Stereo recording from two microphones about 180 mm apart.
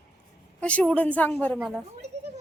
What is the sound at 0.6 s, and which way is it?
Speech, 5° left (ahead or behind).